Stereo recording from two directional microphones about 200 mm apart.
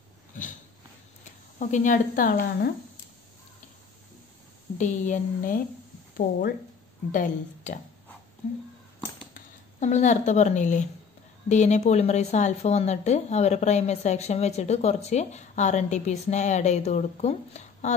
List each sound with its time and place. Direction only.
1.6 s a woman's voice: 40° left (ahead or behind)
4.7 s a woman's voice: 35° left (ahead or behind)
7.1 s a woman's voice: 40° left (ahead or behind)
9.3 s a woman's voice: 35° left (ahead or behind)